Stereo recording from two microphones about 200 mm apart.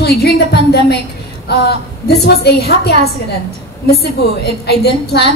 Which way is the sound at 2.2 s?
55° left (ahead or behind).